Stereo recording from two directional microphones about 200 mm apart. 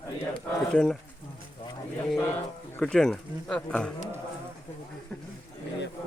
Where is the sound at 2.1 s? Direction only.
10° left (ahead or behind).